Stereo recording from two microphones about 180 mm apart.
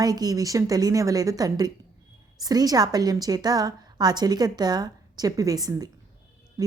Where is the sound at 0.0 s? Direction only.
20° right (ahead or behind).